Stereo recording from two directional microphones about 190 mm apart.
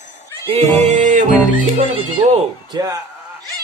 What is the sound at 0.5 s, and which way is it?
Music, 35° right (ahead or behind).